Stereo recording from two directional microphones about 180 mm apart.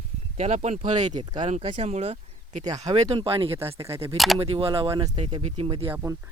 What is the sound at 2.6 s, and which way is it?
Speech, 20° right (ahead or behind).